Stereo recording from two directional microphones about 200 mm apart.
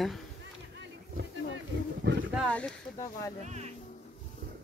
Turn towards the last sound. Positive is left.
turn(degrees=-35)  # may be behind; listen again after turning